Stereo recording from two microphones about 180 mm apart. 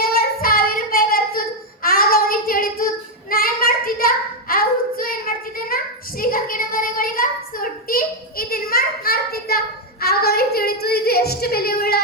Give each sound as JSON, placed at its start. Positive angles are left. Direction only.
{"t": 0.0, "sound": "child singing", "side_deg": 55}